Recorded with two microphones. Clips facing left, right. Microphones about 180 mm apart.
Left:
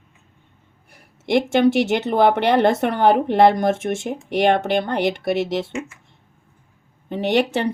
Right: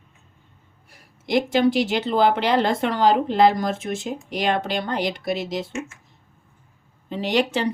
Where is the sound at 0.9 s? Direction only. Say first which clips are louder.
Left 3 dB; 60° left (ahead or behind).